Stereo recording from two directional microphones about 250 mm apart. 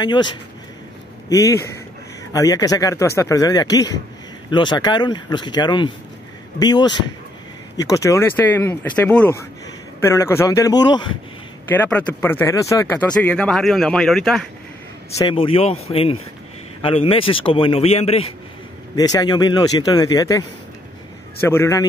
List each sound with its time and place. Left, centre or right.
0.0 s speech: centre
1.3 s speech: centre
11.7 s speech: centre
15.1 s a man's voice: centre